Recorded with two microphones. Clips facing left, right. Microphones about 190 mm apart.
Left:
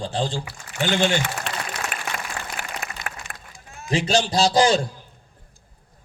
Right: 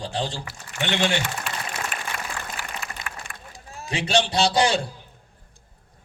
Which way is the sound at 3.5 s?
35° right (ahead or behind).